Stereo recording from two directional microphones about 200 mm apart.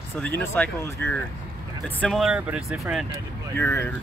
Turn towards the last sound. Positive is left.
turn(degrees=10)  # may be behind; listen again after turning